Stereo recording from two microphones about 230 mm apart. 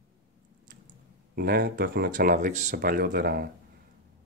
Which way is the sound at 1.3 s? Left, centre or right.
Right.